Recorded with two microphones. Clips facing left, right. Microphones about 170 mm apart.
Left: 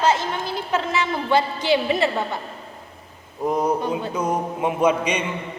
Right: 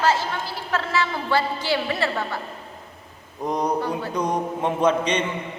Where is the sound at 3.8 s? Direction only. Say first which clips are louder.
Left 1 dB; 20° left (ahead or behind).